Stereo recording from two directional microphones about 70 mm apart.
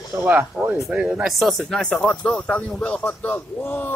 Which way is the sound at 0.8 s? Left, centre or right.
Centre.